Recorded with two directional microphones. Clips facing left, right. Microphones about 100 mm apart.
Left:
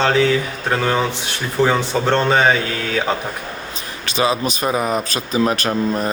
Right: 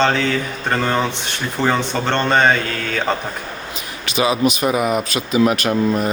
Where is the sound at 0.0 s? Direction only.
5° left (ahead or behind).